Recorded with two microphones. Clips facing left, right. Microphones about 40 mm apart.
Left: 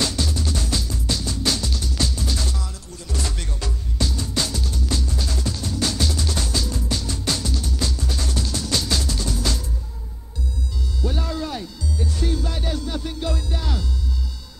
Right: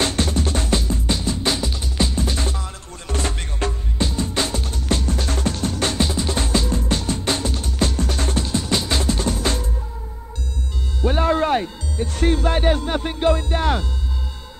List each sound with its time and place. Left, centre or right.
0.0 s music: right
11.0 s music: right